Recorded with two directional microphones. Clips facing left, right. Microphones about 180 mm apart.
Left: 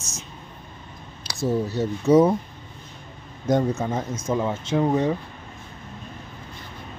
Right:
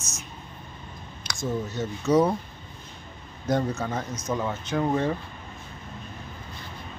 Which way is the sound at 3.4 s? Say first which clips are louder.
Left 4 dB; 20° left (ahead or behind).